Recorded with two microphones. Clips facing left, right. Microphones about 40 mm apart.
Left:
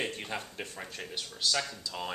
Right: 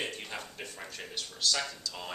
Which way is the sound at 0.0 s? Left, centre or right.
Centre.